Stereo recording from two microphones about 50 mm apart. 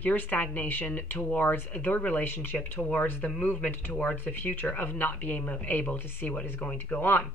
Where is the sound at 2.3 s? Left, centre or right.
Left.